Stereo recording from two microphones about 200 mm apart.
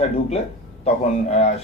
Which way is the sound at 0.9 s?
30° left (ahead or behind).